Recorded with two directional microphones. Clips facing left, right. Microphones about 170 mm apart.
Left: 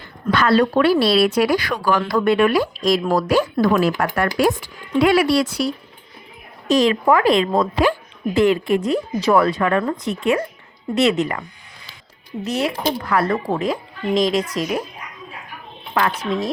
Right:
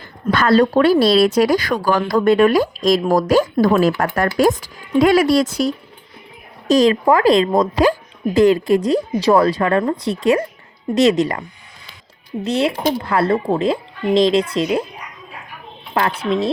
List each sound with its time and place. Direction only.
0.3 s speech: 45° right (ahead or behind)
12.5 s speech: 30° right (ahead or behind)
16.0 s speech: 30° right (ahead or behind)